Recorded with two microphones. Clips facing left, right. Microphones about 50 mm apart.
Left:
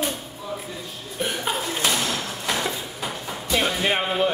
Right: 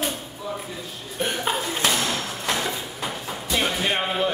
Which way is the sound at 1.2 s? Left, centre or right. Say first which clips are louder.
Right 1 dB; centre.